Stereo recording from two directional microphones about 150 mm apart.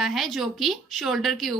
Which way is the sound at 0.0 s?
Centre (ahead or behind).